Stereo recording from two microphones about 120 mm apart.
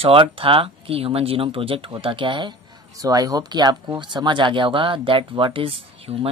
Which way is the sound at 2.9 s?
30° right (ahead or behind).